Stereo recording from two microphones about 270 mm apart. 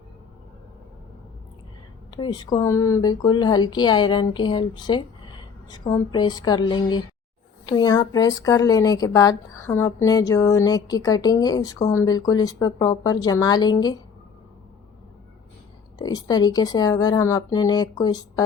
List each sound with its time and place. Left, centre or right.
2.0 s speech: centre
16.0 s speech: centre